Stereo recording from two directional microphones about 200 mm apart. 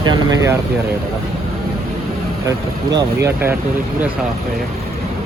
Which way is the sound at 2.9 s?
15° right (ahead or behind).